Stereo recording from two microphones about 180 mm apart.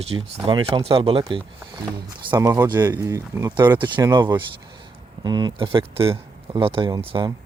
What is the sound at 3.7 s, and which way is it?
Speech, 25° right (ahead or behind).